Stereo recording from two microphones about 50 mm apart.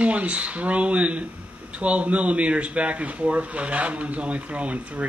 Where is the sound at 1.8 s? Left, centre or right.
Right.